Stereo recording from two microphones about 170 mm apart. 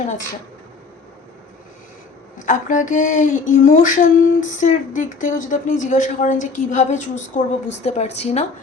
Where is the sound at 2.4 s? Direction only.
50° left (ahead or behind).